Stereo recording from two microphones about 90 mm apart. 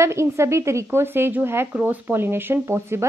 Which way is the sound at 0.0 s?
30° right (ahead or behind).